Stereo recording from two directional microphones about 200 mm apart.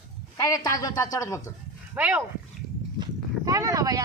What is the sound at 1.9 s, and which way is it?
Speech, 10° right (ahead or behind).